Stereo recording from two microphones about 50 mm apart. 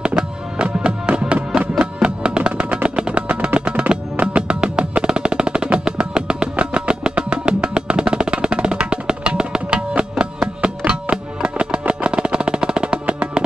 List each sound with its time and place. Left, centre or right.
0.0 s music: centre